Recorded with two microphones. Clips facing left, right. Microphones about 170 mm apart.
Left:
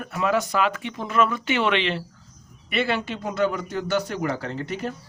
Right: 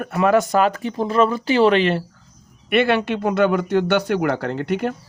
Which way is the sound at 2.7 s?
60° right (ahead or behind).